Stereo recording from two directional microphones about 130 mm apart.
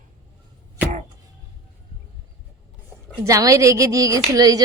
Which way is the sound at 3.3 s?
25° right (ahead or behind).